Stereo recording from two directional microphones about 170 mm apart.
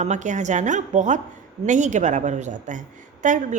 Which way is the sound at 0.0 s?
45° right (ahead or behind).